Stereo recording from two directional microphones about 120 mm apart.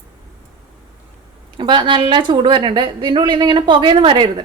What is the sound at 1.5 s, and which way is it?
A woman's voice, 40° right (ahead or behind).